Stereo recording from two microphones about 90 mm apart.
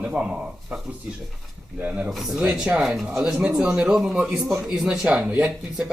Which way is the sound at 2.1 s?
5° right (ahead or behind).